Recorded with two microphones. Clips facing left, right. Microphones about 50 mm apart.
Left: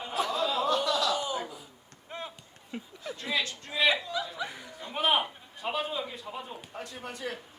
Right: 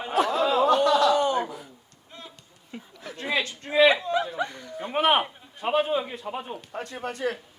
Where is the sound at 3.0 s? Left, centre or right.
Right.